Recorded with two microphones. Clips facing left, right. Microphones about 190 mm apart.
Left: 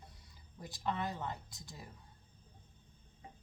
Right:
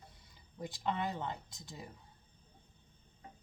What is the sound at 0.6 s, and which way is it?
Speech, 20° right (ahead or behind).